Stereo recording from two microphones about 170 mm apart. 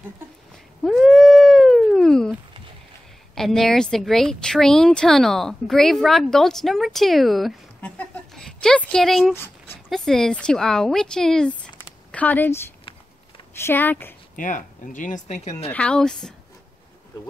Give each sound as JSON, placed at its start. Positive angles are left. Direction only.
{"t": 0.8, "sound": "cat", "side_deg": 0}
{"t": 3.3, "sound": "speech", "side_deg": 0}
{"t": 9.3, "sound": "dog", "side_deg": 15}
{"t": 9.8, "sound": "speech", "side_deg": 0}
{"t": 14.3, "sound": "speech", "side_deg": 50}
{"t": 15.7, "sound": "speech", "side_deg": 5}